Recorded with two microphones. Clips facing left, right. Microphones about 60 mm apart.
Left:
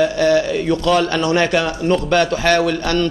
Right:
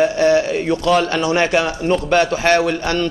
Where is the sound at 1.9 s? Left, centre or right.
Centre; by 3.1 s right.